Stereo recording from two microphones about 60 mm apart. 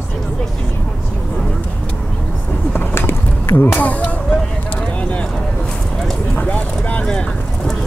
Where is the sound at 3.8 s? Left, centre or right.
Left.